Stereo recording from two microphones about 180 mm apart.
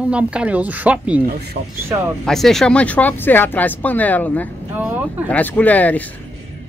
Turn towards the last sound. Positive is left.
turn(degrees=10)  # may be behind; listen again after turning